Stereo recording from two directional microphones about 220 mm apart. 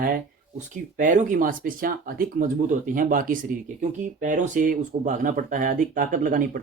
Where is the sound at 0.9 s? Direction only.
35° right (ahead or behind).